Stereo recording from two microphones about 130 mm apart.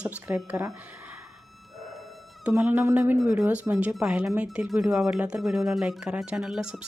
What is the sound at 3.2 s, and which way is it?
Speech, centre (ahead or behind).